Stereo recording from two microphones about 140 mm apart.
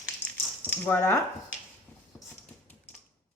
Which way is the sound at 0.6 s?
15° left (ahead or behind).